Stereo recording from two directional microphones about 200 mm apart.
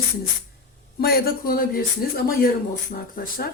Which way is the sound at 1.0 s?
50° left (ahead or behind).